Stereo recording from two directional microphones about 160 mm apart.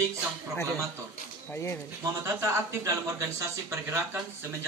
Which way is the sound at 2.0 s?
20° right (ahead or behind).